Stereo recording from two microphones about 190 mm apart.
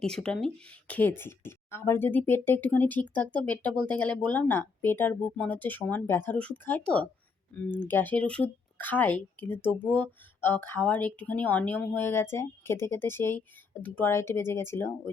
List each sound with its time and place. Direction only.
0.0 s speech: 5° left (ahead or behind)